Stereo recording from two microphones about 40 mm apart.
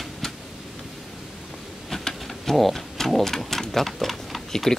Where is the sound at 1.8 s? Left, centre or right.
Centre.